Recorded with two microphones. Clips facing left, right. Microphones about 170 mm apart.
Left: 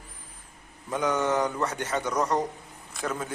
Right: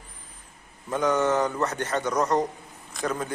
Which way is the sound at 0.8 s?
10° left (ahead or behind).